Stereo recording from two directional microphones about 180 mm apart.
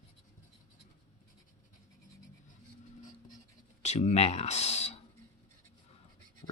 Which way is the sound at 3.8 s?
40° left (ahead or behind).